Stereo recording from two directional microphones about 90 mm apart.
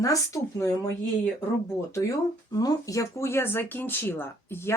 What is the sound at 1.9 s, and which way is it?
Speech, 35° left (ahead or behind).